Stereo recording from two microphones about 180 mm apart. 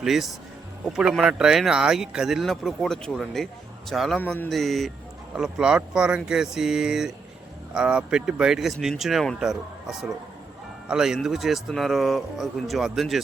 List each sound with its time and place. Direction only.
0.0 s speech: centre (ahead or behind)